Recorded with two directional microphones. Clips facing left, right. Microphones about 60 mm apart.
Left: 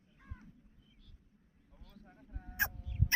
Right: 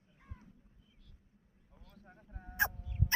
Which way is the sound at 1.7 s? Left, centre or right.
Centre.